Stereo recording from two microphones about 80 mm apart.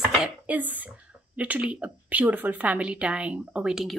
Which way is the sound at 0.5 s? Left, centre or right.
Right.